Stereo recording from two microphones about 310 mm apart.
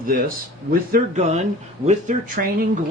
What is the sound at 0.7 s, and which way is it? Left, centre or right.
Speech, right.